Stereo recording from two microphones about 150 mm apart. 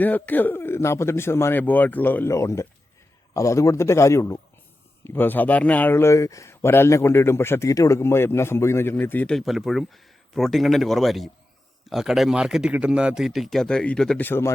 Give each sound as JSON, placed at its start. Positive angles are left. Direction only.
{"t": 0.0, "sound": "a man's voice", "side_deg": 10}